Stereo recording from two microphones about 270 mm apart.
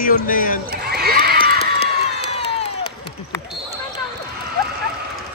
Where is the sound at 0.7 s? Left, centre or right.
Right.